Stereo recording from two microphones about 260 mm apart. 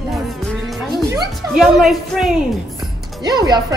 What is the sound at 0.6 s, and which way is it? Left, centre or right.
Music, centre.